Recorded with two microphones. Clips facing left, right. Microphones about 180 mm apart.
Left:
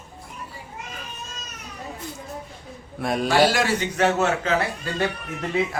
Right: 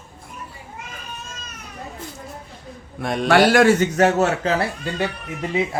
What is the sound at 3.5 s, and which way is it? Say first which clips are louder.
A man's voice: right 8 dB; 50° right (ahead or behind).